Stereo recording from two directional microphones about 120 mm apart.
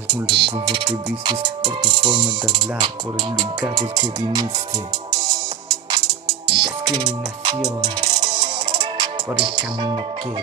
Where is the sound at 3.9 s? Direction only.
35° right (ahead or behind).